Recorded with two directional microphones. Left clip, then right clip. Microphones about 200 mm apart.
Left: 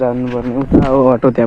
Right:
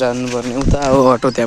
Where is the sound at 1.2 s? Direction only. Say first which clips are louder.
Left 4 dB; 5° right (ahead or behind).